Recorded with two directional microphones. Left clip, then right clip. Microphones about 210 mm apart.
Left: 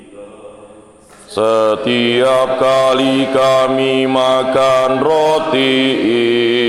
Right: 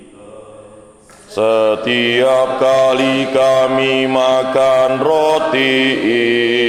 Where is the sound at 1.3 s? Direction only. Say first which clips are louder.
Even; 25° left (ahead or behind).